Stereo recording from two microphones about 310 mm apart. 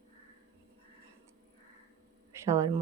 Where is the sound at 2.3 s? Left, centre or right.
Centre.